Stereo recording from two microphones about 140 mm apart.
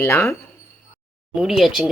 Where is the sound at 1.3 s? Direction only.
Centre (ahead or behind).